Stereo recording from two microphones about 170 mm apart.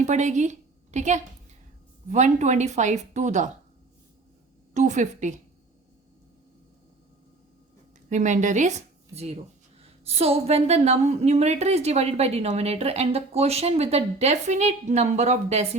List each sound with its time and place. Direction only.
0.0 s a woman's voice: 45° right (ahead or behind)
4.7 s a woman's voice: 45° right (ahead or behind)
8.1 s a woman's voice: 45° right (ahead or behind)